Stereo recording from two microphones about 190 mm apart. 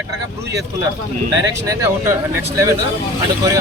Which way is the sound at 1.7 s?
15° right (ahead or behind).